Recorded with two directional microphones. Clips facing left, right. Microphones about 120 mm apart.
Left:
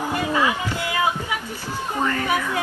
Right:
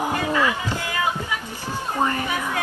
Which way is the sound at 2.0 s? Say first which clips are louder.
Left 1 dB; 25° right (ahead or behind).